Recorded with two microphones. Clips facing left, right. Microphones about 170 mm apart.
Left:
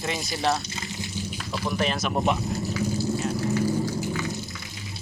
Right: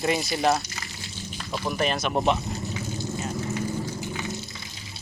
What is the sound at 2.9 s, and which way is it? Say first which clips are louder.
Vehicle: left 4 dB; 10° left (ahead or behind).